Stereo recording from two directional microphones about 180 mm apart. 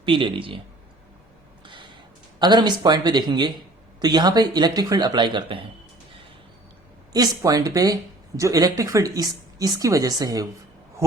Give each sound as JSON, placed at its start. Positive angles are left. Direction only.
{"t": 0.0, "sound": "speech", "side_deg": -25}
{"t": 1.6, "sound": "a sound", "side_deg": -25}
{"t": 2.4, "sound": "speech", "side_deg": -25}
{"t": 7.1, "sound": "speech", "side_deg": -20}